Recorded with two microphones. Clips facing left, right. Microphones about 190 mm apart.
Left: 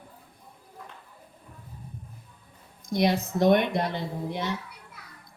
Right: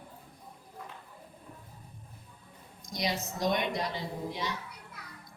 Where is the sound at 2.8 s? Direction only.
60° left (ahead or behind).